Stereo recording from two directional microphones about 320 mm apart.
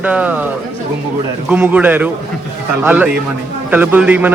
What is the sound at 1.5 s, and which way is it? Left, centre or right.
A man's voice, centre.